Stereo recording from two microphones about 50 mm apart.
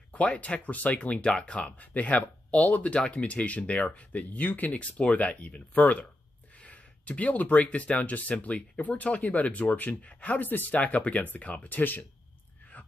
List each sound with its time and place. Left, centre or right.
0.1 s speech: left